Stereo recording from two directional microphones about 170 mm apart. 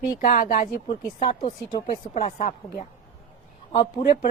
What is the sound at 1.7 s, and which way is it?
Speech, 50° left (ahead or behind).